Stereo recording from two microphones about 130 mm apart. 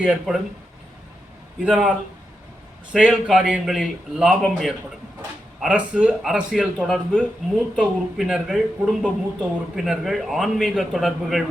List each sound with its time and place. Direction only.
0.0 s speech: 10° right (ahead or behind)
1.6 s speech: 5° right (ahead or behind)
2.9 s a man's voice: 5° right (ahead or behind)